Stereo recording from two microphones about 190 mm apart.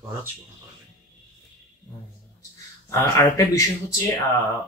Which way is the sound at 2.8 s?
15° left (ahead or behind).